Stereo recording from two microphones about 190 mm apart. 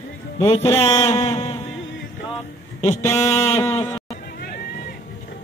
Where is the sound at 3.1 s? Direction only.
35° left (ahead or behind).